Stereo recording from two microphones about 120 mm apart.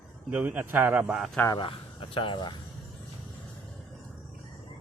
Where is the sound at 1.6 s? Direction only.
45° left (ahead or behind).